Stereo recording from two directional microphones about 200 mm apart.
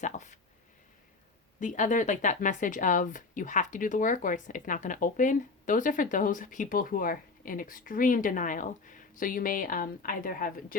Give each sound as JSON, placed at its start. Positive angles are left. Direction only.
{"t": 0.0, "sound": "speech", "side_deg": 35}
{"t": 1.5, "sound": "speech", "side_deg": 40}